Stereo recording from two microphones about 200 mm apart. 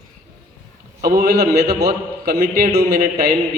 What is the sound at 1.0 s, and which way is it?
A man's voice, 50° right (ahead or behind).